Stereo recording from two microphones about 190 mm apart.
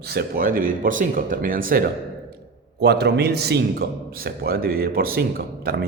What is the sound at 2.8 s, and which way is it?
A man's voice, 60° right (ahead or behind).